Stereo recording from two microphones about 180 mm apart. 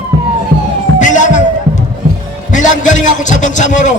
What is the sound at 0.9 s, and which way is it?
Music, 45° left (ahead or behind).